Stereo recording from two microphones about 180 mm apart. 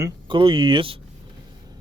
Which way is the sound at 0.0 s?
25° right (ahead or behind).